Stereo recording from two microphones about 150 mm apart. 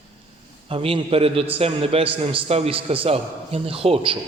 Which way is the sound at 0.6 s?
40° right (ahead or behind).